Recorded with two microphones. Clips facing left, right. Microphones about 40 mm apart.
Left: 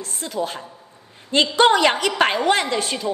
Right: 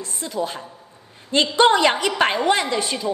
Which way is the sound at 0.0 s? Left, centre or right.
Left.